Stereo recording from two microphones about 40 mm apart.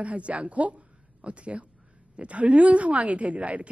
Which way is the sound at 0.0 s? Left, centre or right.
Right.